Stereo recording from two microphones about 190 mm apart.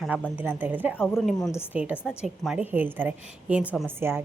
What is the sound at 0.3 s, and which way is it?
A woman's voice, 10° right (ahead or behind).